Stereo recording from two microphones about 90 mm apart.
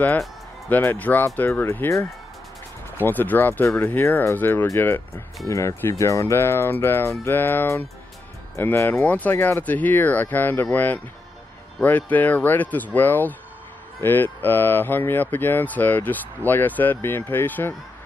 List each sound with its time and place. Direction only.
0.7 s speech: 20° left (ahead or behind)
3.0 s speech: 20° left (ahead or behind)